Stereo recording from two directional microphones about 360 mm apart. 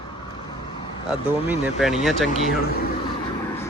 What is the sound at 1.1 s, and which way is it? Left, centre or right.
Speech, centre.